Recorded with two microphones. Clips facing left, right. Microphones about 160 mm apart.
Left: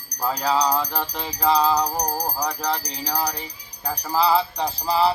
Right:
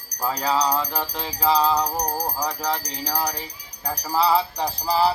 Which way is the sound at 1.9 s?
10° left (ahead or behind).